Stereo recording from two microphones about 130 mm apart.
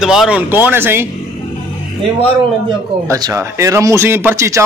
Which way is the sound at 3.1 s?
25° right (ahead or behind).